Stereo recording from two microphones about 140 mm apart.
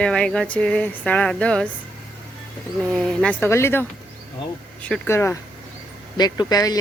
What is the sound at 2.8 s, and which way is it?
Speech, 5° left (ahead or behind).